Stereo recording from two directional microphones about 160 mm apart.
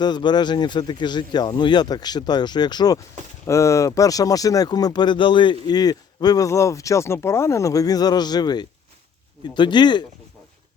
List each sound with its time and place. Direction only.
0.0 s speech: 25° left (ahead or behind)